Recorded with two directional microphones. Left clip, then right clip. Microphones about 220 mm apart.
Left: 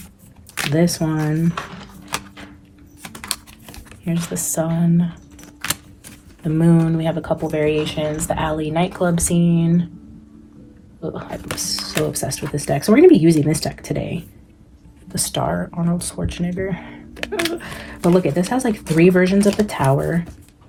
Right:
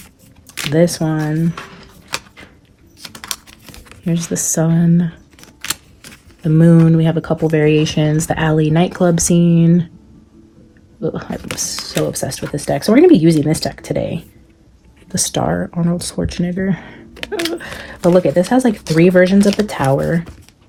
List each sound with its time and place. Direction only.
0.7 s speech: 45° right (ahead or behind)
1.9 s a sound: centre (ahead or behind)
3.0 s computer keyboard: 5° right (ahead or behind)
4.0 s speech: 50° right (ahead or behind)
5.4 s a sound: centre (ahead or behind)
6.4 s speech: 50° right (ahead or behind)
11.0 s speech: 40° right (ahead or behind)